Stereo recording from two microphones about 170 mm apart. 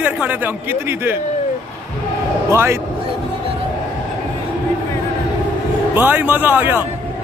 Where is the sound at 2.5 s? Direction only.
15° right (ahead or behind).